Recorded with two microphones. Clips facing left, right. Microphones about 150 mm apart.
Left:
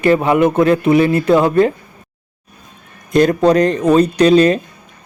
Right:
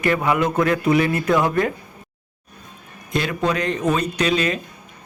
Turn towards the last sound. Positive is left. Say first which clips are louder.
# left 11 dB
turn(degrees=35)  # may be behind; listen again after turning